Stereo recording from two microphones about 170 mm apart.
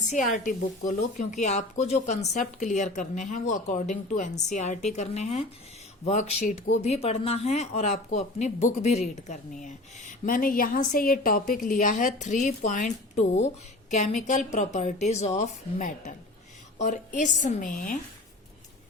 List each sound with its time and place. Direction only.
0.1 s a woman's voice: 50° left (ahead or behind)